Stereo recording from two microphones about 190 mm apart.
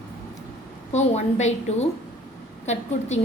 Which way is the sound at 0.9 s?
35° left (ahead or behind).